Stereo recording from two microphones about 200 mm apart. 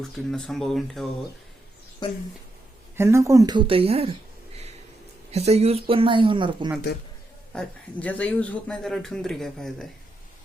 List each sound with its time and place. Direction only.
0.0 s speech: centre (ahead or behind)
3.0 s speech: 15° right (ahead or behind); by 4.1 s 30° right (ahead or behind)
5.3 s speech: 30° right (ahead or behind)
6.9 s a man's voice: 55° left (ahead or behind)
7.5 s speech: 5° left (ahead or behind)